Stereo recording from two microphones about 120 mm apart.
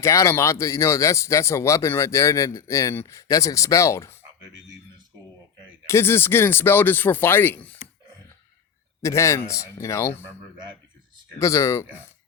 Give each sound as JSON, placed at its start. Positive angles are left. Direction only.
{"t": 0.0, "sound": "speech", "side_deg": 25}
{"t": 5.8, "sound": "speech", "side_deg": 20}
{"t": 9.0, "sound": "speech", "side_deg": 25}
{"t": 11.3, "sound": "speech", "side_deg": 25}